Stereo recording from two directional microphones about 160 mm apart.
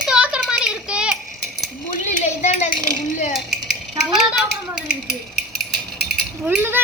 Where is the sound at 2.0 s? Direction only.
45° left (ahead or behind).